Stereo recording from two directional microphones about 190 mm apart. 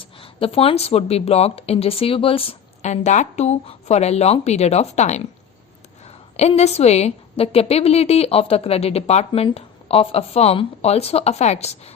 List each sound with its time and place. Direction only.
0.0 s a woman's voice: 30° left (ahead or behind)
6.3 s a woman's voice: 35° left (ahead or behind)